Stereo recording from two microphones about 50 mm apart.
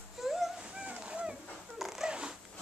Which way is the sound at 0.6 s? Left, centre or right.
Centre.